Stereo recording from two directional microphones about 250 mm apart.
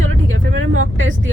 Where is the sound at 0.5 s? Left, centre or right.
Right.